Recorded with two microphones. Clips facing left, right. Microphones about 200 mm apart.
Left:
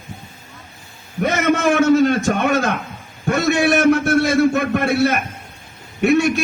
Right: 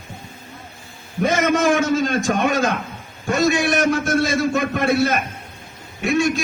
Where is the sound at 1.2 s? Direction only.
60° left (ahead or behind).